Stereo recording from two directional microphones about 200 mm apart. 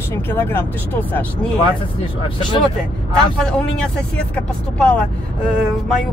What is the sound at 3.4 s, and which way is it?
Speech, 5° left (ahead or behind).